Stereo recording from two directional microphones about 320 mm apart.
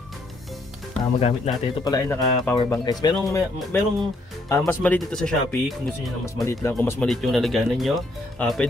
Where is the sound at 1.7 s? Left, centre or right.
Centre.